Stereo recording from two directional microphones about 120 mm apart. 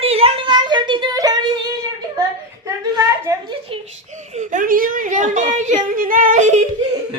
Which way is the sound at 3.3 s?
25° right (ahead or behind).